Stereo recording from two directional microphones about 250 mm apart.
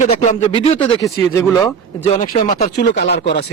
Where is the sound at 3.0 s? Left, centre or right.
Left.